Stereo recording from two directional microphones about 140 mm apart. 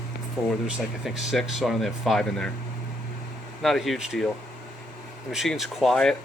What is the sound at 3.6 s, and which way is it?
Speech, centre (ahead or behind).